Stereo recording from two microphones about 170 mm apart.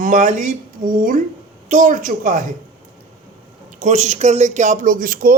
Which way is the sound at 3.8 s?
45° right (ahead or behind).